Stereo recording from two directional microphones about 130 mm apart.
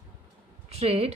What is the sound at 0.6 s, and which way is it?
Speech, 55° right (ahead or behind).